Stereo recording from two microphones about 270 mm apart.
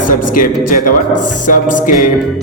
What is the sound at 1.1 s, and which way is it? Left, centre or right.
Speech, left.